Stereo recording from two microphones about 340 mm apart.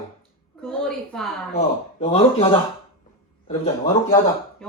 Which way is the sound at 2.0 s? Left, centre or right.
Centre.